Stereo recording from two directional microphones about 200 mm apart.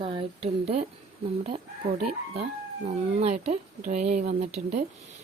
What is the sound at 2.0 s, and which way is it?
Speech, 30° right (ahead or behind).